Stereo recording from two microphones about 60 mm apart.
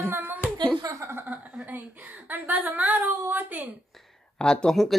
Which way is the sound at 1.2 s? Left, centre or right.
Right.